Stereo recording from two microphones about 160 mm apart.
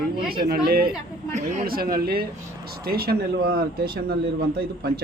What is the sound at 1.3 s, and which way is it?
Speech, 55° right (ahead or behind).